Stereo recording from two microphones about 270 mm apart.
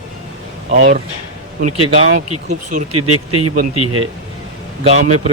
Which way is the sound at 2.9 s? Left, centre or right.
Right.